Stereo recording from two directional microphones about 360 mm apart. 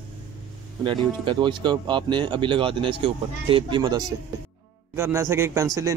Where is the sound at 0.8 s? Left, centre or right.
Centre.